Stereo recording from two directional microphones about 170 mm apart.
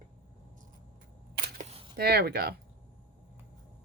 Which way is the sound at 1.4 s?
60° right (ahead or behind).